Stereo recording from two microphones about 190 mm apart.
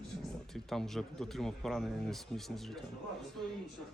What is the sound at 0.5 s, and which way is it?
Speech, centre (ahead or behind).